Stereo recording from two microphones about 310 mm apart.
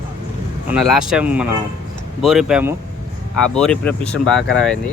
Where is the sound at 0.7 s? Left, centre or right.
Centre.